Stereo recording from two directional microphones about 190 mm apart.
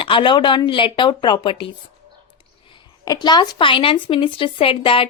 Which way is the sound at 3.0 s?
20° left (ahead or behind).